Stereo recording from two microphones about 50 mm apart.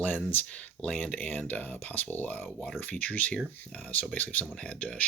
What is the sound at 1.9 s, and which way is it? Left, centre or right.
Speech, left.